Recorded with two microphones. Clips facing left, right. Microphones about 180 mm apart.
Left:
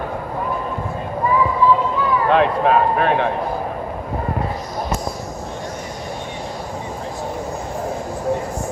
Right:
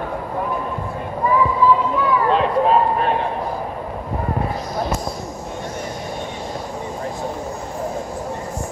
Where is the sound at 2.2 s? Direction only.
65° left (ahead or behind).